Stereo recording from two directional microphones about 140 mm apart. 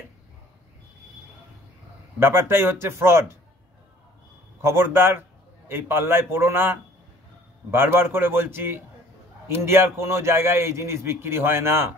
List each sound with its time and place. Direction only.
2.1 s a man's voice: 15° right (ahead or behind)
4.6 s a man's voice: 20° right (ahead or behind)